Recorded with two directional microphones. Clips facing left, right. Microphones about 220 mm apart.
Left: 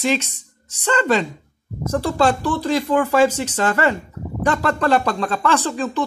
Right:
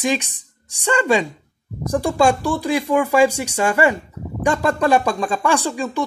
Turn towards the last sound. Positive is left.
turn(degrees=-10)  # may be behind; listen again after turning